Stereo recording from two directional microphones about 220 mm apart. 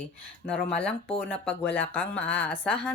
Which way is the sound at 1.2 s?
10° left (ahead or behind).